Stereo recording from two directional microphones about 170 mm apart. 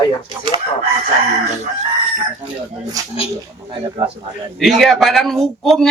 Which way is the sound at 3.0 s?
20° right (ahead or behind).